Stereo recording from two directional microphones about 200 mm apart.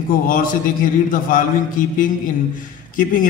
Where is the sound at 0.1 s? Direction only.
45° left (ahead or behind).